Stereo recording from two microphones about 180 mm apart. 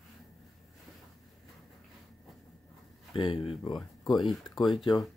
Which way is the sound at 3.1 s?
25° left (ahead or behind).